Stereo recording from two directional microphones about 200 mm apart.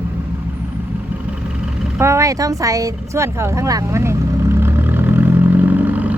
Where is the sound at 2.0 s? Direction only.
15° right (ahead or behind).